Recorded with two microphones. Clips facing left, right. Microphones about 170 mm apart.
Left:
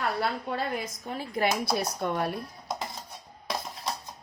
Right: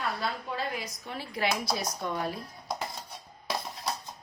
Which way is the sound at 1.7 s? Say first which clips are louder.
Left 4 dB; 55° left (ahead or behind).